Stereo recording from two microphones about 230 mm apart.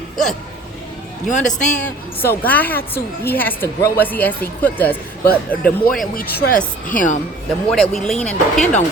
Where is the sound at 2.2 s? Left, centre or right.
Centre.